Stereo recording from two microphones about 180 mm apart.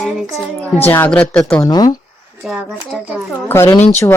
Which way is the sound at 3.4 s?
15° left (ahead or behind).